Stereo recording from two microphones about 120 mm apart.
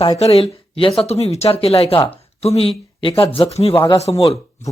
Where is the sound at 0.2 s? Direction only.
55° left (ahead or behind).